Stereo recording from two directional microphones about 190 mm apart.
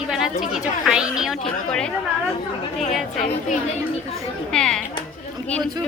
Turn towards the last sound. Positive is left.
turn(degrees=5)  # may be behind; listen again after turning